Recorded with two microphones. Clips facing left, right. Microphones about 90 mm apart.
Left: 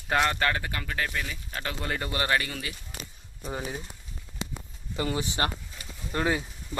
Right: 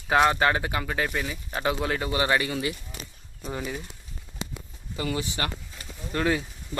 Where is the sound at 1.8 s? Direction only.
5° right (ahead or behind).